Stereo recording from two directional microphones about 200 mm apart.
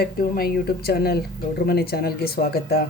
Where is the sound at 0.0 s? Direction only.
50° left (ahead or behind).